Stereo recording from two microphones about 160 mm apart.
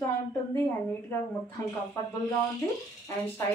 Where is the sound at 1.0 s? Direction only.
10° left (ahead or behind).